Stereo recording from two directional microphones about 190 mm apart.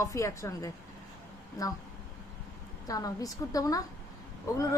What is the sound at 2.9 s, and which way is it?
Speech, 20° left (ahead or behind).